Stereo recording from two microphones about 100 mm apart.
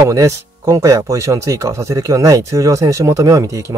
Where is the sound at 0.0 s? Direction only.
30° right (ahead or behind).